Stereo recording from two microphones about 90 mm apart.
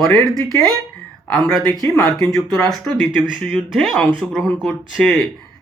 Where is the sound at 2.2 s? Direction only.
5° left (ahead or behind).